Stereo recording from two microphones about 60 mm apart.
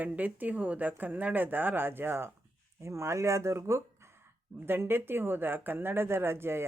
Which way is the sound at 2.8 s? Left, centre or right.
Right.